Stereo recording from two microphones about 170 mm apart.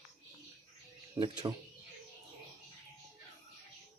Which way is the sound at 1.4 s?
20° right (ahead or behind).